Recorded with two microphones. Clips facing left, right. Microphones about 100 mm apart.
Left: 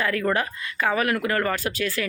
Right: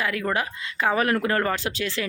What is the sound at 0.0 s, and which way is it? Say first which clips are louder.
A woman's voice: left 2 dB; 10° right (ahead or behind).